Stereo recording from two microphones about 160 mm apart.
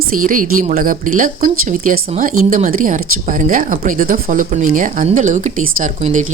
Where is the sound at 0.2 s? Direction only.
55° right (ahead or behind).